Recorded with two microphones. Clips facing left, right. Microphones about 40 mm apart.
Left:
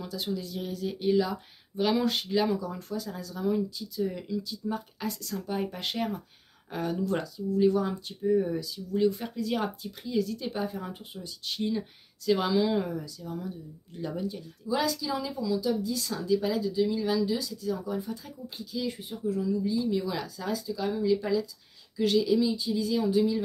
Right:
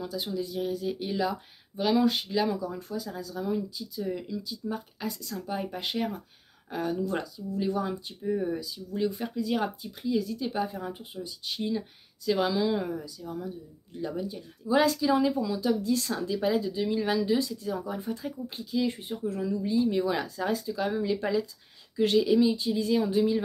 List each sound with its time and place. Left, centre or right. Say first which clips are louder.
0.0 s speech: right 1 dB; centre
8.9 s speech: left 3 dB; centre
12.9 s speech: even; centre
14.7 s speech: right 5 dB; right
18.9 s speech: even; right
19.6 s speech: right 2 dB; right